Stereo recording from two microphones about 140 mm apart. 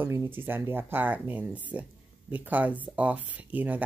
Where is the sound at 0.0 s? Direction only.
15° right (ahead or behind).